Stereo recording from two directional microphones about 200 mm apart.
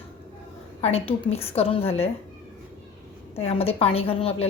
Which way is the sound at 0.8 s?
30° left (ahead or behind).